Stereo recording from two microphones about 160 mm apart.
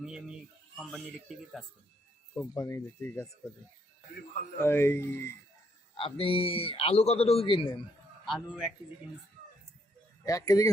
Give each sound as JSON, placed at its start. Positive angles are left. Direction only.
{"t": 0.0, "sound": "speech", "side_deg": -5}
{"t": 2.6, "sound": "speech", "side_deg": 20}
{"t": 4.6, "sound": "speech", "side_deg": 15}
{"t": 5.9, "sound": "a man's voice", "side_deg": 30}
{"t": 8.2, "sound": "speech", "side_deg": 0}
{"t": 10.2, "sound": "speech", "side_deg": 20}